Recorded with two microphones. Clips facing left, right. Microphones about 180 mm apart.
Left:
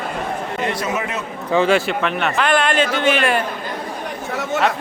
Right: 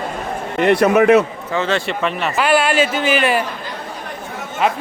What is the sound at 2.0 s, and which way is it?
A man's voice, centre (ahead or behind).